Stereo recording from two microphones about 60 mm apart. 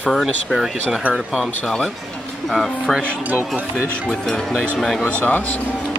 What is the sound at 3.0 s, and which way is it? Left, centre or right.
Speech, right.